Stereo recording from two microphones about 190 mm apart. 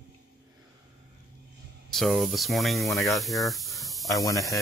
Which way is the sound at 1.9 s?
Centre (ahead or behind).